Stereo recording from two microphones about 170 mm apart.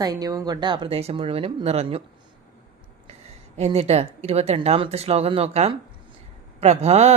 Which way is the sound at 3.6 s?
40° right (ahead or behind).